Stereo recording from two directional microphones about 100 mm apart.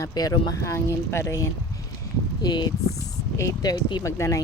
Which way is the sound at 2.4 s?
45° left (ahead or behind).